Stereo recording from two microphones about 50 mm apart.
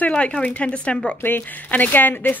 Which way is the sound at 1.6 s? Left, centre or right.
Left.